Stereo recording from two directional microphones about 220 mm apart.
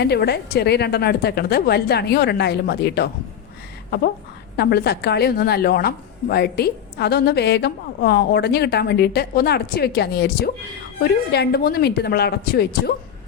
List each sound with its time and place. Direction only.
0.0 s speech: 50° left (ahead or behind)
4.5 s speech: 50° left (ahead or behind)